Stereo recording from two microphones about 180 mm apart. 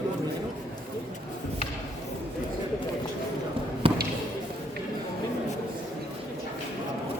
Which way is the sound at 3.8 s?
30° right (ahead or behind).